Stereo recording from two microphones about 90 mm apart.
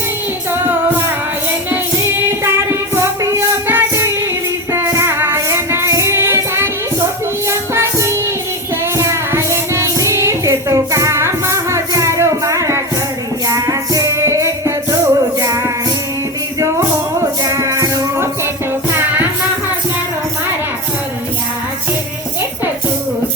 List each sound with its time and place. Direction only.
1.7 s child singing: 25° right (ahead or behind)
3.7 s music: 25° right (ahead or behind)
7.7 s music: 30° right (ahead or behind)
9.3 s music: 30° right (ahead or behind)
17.5 s music: 35° right (ahead or behind)